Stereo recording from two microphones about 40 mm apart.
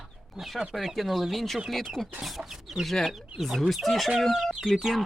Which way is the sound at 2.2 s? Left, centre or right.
Centre.